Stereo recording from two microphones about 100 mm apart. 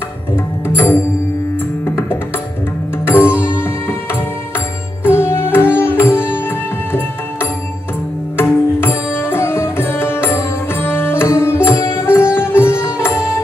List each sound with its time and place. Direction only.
0.7 s music: 20° left (ahead or behind)
3.1 s music: 25° left (ahead or behind)